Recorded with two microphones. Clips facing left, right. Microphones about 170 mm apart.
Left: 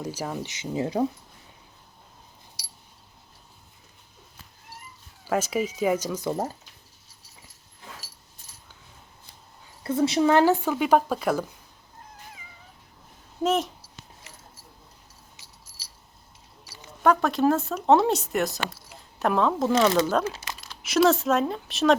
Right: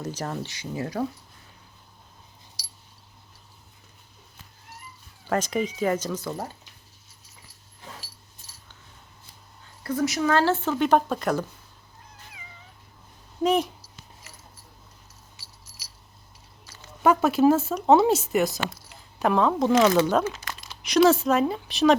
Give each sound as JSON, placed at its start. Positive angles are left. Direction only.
{"t": 0.0, "sound": "speech", "side_deg": 10}
{"t": 0.5, "sound": "speech", "side_deg": 20}
{"t": 2.6, "sound": "a sound", "side_deg": 60}
{"t": 5.2, "sound": "speech", "side_deg": 5}
{"t": 9.8, "sound": "speech", "side_deg": 25}
{"t": 13.4, "sound": "speech", "side_deg": 0}
{"t": 15.4, "sound": "keys jangling", "side_deg": 20}
{"t": 17.0, "sound": "speech", "side_deg": -5}
{"t": 20.8, "sound": "speech", "side_deg": 0}